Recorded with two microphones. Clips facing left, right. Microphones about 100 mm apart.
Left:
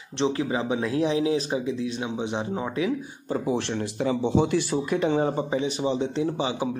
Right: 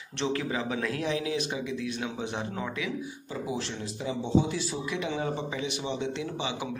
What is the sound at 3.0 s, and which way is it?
Speech, 45° left (ahead or behind).